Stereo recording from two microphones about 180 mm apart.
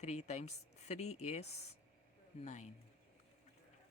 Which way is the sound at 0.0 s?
40° left (ahead or behind).